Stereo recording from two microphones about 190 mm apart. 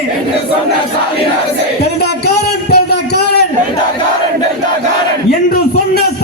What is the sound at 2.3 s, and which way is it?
Music, 60° left (ahead or behind).